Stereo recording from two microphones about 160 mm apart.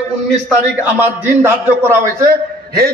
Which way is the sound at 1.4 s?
15° right (ahead or behind).